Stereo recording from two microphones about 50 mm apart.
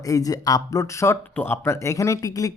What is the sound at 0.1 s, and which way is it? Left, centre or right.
Speech, left.